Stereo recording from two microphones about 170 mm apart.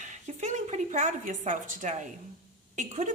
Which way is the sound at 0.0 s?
45° right (ahead or behind).